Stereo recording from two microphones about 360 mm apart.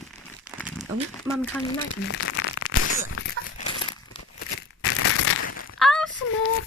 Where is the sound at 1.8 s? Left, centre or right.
Left.